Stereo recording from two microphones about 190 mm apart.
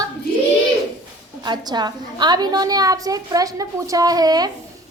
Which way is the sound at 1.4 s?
20° right (ahead or behind).